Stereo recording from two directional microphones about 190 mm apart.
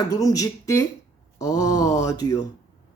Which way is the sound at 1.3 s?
15° left (ahead or behind).